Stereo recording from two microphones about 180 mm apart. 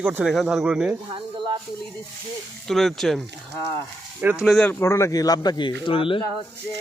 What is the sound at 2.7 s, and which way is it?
Speech, centre (ahead or behind).